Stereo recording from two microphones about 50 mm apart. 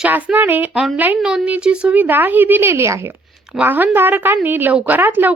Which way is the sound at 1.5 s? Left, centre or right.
Right.